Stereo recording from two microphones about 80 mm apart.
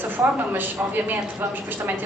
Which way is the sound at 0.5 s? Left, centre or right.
Right.